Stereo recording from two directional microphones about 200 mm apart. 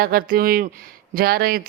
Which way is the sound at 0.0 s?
45° right (ahead or behind).